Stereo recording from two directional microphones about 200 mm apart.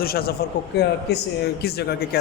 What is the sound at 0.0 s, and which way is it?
A man's voice, 50° left (ahead or behind).